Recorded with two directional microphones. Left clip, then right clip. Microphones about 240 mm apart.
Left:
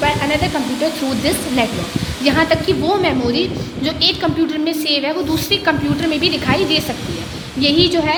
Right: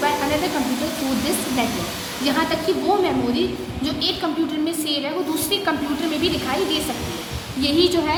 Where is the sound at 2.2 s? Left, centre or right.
Left.